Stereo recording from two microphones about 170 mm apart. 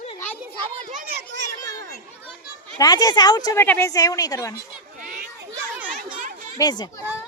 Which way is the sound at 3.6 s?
10° left (ahead or behind).